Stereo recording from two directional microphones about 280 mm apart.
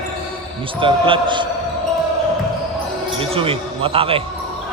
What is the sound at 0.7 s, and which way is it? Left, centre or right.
Speech, centre.